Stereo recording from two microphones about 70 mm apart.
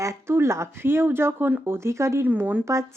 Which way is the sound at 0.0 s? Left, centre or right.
Right.